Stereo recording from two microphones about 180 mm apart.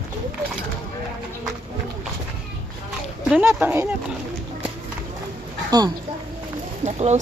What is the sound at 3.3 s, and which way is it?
Speech, 10° right (ahead or behind).